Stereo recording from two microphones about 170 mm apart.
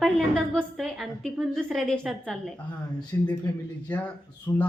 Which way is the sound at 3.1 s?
15° left (ahead or behind).